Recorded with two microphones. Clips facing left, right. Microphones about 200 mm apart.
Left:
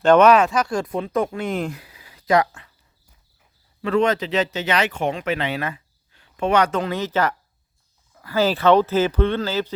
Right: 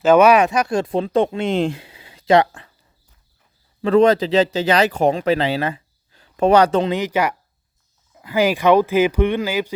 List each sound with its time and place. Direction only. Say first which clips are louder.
0.0 s speech: right 1 dB; 5° right (ahead or behind); by 2.7 s 30° right (ahead or behind)
3.8 s speech: right 6 dB; 35° right (ahead or behind)
6.8 s speech: right 3 dB; 15° right (ahead or behind)